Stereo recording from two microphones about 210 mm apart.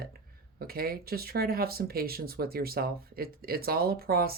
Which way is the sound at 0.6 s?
45° right (ahead or behind).